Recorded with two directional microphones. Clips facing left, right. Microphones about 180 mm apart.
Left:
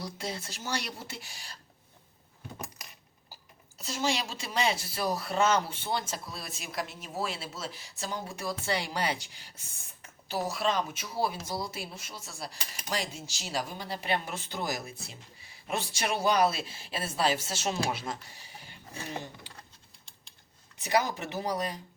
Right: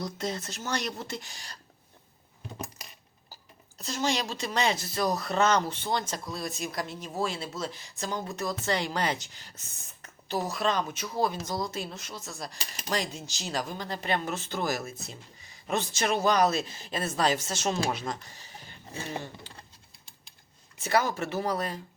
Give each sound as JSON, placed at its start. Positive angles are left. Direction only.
{"t": 0.0, "sound": "speech", "side_deg": 10}
{"t": 3.8, "sound": "speech", "side_deg": 5}
{"t": 20.7, "sound": "speech", "side_deg": 15}